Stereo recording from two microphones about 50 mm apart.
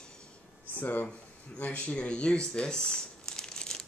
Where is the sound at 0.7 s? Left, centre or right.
Left.